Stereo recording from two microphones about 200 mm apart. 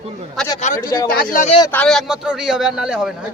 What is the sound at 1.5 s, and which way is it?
Speech, 20° left (ahead or behind).